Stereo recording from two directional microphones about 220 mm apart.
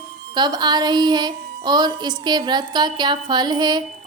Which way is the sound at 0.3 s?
20° right (ahead or behind).